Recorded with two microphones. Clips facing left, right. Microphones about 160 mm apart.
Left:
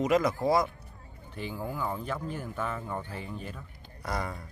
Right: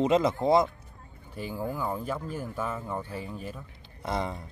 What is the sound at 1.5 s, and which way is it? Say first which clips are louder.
Speech: right 3 dB; 10° right (ahead or behind).